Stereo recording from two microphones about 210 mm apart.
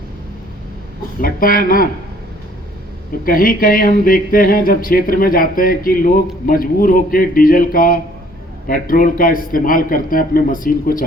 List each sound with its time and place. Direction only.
1.2 s speech: 45° left (ahead or behind)
3.2 s a man's voice: 40° left (ahead or behind)